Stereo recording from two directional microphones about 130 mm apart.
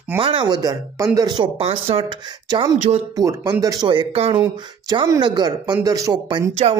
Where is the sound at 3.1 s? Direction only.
25° right (ahead or behind).